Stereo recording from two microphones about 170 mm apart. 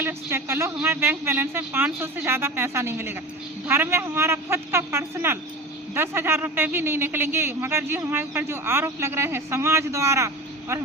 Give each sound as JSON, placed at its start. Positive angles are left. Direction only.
{"t": 0.0, "sound": "speech", "side_deg": -15}